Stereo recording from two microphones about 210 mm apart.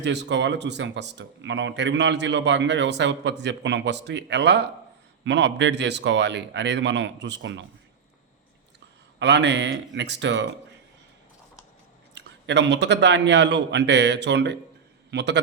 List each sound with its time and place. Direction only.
0.0 s speech: 55° right (ahead or behind)
9.1 s speech: 55° right (ahead or behind)
12.1 s a man's voice: 55° right (ahead or behind)